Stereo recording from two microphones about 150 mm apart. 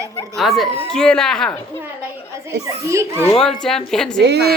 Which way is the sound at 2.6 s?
20° right (ahead or behind).